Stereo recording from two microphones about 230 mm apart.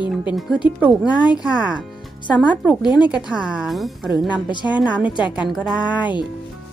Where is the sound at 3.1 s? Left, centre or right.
Centre.